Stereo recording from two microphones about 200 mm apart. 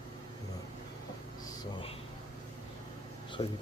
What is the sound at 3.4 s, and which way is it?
Speech, 30° left (ahead or behind).